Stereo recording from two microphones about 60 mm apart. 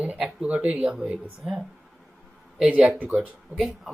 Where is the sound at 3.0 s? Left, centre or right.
Centre.